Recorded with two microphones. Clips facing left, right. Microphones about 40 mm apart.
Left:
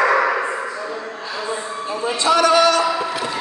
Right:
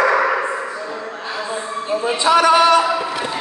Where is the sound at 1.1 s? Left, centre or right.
Right.